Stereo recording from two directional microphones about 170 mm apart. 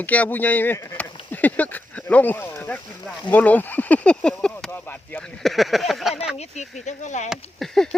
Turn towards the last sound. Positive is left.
turn(degrees=0)  # may be behind; listen again after turning